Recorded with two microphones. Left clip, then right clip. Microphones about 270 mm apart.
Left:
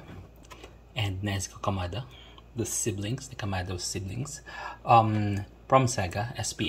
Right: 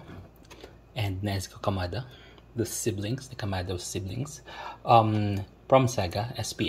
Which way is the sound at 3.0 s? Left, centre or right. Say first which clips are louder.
Right 1 dB; centre.